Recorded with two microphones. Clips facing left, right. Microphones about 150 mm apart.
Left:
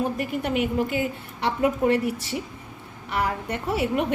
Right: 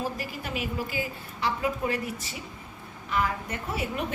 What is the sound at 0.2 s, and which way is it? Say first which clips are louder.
A woman's voice: left 9 dB; 65° left (ahead or behind).